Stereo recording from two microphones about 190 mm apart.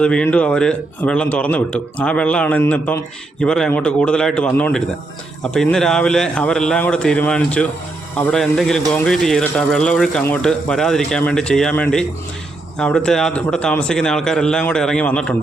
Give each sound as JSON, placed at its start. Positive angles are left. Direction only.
{"t": 0.0, "sound": "a man's voice", "side_deg": 5}